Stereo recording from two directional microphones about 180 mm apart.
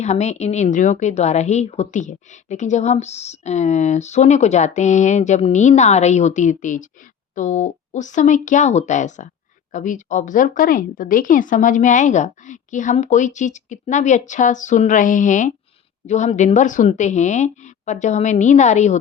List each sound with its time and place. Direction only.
0.0 s a woman's voice: 40° left (ahead or behind)